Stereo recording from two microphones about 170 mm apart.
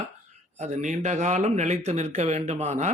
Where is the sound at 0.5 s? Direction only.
45° right (ahead or behind).